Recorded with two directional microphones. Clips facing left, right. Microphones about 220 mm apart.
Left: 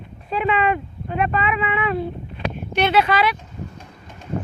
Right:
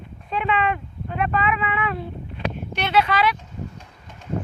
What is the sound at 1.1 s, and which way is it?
Speech, 20° left (ahead or behind).